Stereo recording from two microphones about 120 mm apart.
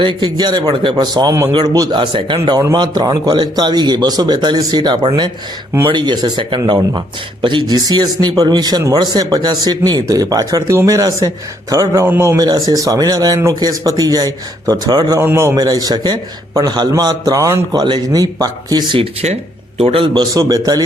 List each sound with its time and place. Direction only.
0.0 s a man's voice: 45° right (ahead or behind)
15.2 s a man's voice: 20° right (ahead or behind); by 19.0 s 40° right (ahead or behind)
19.2 s speech: 60° right (ahead or behind)
20.3 s a man's voice: 30° right (ahead or behind)